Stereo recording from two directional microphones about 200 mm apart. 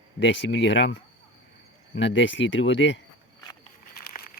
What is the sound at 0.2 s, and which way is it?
Speech, 65° left (ahead or behind).